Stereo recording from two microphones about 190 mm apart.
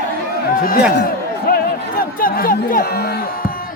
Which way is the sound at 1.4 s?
50° left (ahead or behind).